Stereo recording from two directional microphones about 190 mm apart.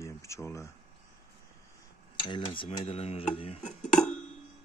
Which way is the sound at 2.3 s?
30° left (ahead or behind).